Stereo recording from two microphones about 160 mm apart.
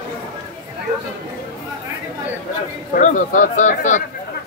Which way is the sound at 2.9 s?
55° left (ahead or behind).